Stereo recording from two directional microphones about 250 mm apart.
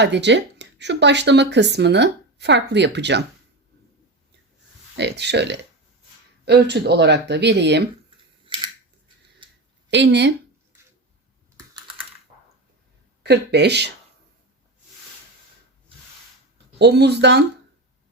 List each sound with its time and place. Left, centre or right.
0.0 s speech: right
4.9 s speech: right
9.4 s a sound: centre
9.9 s speech: right
13.2 s speech: right
16.7 s speech: right